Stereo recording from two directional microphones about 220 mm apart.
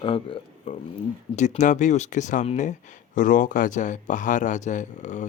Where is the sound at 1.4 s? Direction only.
35° left (ahead or behind).